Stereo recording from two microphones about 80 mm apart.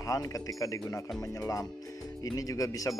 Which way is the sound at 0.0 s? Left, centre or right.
Left.